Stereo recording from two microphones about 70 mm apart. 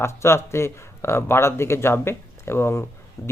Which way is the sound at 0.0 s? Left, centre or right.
Left.